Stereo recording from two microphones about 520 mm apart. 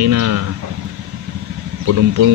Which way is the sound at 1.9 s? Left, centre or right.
Right.